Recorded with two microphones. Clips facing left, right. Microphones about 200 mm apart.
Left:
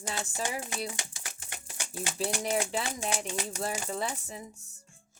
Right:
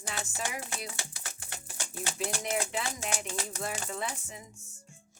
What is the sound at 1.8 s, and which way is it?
Speech, 15° left (ahead or behind).